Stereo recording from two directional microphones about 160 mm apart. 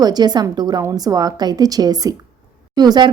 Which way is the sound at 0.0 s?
25° right (ahead or behind).